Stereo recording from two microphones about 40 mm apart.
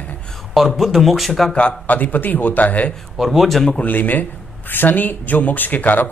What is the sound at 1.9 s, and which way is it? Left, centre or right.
Speech, left.